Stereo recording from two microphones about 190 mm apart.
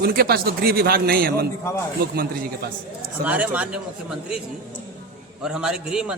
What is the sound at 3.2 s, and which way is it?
A man's voice, 5° right (ahead or behind).